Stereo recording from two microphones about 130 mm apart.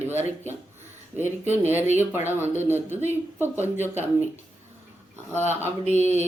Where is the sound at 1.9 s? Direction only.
15° right (ahead or behind).